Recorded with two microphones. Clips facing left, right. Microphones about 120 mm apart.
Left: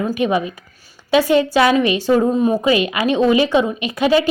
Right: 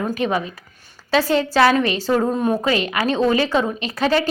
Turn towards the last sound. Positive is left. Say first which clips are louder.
# left 4 dB
turn(degrees=15)  # may be behind; listen again after turning